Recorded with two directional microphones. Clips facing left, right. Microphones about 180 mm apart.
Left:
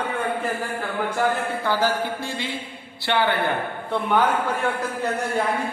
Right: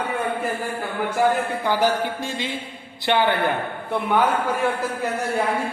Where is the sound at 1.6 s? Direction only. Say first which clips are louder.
Right 1 dB; 15° right (ahead or behind).